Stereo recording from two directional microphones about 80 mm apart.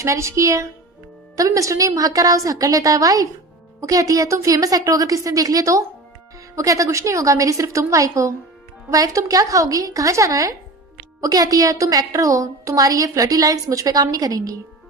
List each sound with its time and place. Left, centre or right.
0.0 s a woman's voice: right